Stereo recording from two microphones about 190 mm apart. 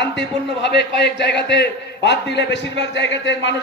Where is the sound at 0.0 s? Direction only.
65° left (ahead or behind).